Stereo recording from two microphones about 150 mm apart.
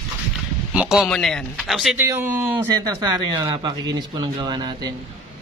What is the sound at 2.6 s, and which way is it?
Speech, 25° right (ahead or behind).